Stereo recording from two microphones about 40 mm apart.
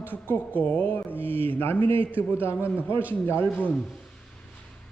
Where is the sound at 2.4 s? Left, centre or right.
Left.